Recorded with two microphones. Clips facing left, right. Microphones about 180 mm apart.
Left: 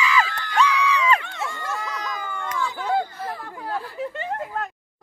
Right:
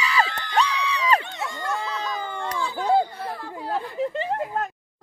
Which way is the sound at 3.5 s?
20° right (ahead or behind).